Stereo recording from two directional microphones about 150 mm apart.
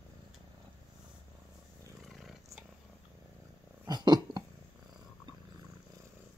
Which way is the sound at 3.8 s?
25° right (ahead or behind).